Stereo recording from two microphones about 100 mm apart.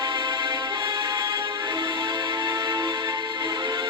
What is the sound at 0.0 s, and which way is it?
Music, 50° right (ahead or behind).